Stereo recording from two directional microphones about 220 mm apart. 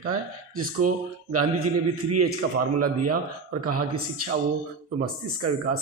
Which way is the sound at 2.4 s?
90° right.